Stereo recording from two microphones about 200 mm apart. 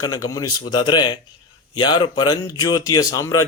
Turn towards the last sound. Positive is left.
turn(degrees=15)  # may be behind; listen again after turning